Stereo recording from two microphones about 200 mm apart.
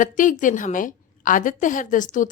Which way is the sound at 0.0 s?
40° left (ahead or behind).